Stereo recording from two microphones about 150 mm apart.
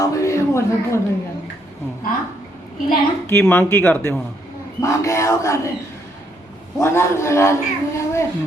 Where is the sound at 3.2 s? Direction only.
10° left (ahead or behind).